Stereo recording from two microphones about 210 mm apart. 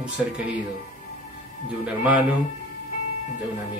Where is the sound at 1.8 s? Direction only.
5° right (ahead or behind).